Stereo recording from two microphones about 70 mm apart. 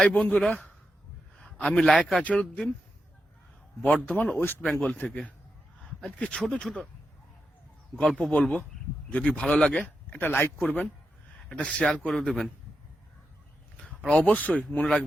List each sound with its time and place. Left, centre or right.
0.0 s a man's voice: centre
3.8 s speech: centre
4.4 s speech: left
4.6 s speech: centre
7.9 s speech: centre
9.8 s speech: left
11.4 s speech: centre
13.7 s a sound: centre
14.2 s speech: left